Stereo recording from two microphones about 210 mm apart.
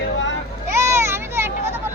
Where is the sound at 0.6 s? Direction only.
15° right (ahead or behind).